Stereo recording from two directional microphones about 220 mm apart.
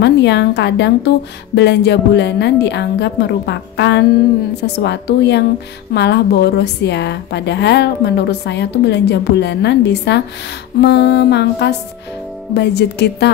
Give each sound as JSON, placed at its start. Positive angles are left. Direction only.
{"t": 0.0, "sound": "a woman's voice", "side_deg": 50}